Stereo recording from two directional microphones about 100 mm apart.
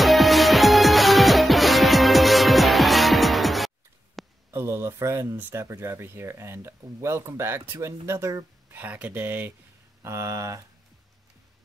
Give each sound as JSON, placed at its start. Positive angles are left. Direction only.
{"t": 0.0, "sound": "music", "side_deg": 0}
{"t": 4.5, "sound": "a sound", "side_deg": -25}
{"t": 5.4, "sound": "speech", "side_deg": -25}
{"t": 8.7, "sound": "speech", "side_deg": -15}